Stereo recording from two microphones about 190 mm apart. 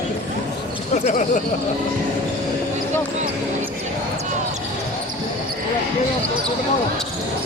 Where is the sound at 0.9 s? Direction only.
40° left (ahead or behind).